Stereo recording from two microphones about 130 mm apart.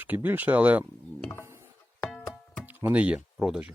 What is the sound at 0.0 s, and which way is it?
Speech, 15° right (ahead or behind).